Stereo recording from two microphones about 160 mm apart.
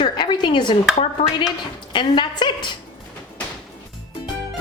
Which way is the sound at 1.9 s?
30° left (ahead or behind).